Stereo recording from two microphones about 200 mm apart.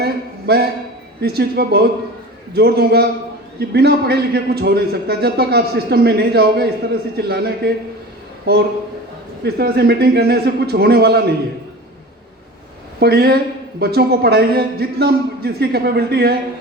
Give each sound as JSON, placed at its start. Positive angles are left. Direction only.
{"t": 0.0, "sound": "a sound", "side_deg": -50}
{"t": 1.2, "sound": "a man's voice", "side_deg": -50}
{"t": 9.4, "sound": "a man's voice", "side_deg": -55}
{"t": 13.0, "sound": "a man's voice", "side_deg": -55}